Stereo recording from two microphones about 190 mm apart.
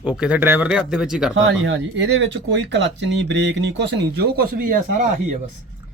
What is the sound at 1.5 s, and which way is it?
Speech, 80° right.